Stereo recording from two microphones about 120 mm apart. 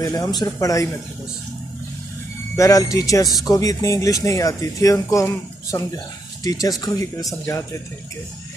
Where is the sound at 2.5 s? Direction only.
25° left (ahead or behind).